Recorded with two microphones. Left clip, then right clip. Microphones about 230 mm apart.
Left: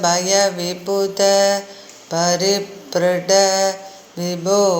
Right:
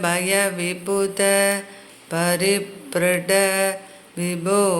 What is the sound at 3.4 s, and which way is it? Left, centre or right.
Mantra, right.